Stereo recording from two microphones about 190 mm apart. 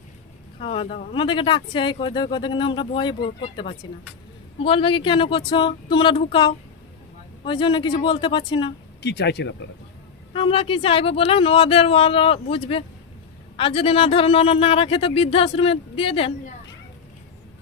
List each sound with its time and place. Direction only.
0.6 s a man's voice: 30° left (ahead or behind)
9.0 s speech: 60° left (ahead or behind)
10.3 s a man's voice: 30° left (ahead or behind)